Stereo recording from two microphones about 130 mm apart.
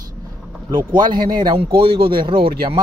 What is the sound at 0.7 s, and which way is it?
Speech, 35° right (ahead or behind).